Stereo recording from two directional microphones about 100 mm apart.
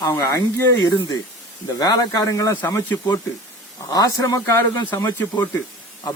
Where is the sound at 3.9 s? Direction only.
40° left (ahead or behind).